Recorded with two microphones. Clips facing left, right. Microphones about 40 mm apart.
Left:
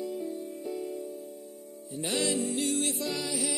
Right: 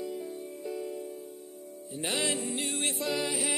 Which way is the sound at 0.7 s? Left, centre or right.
Right.